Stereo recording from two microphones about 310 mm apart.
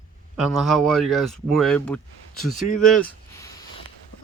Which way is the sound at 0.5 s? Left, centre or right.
Centre.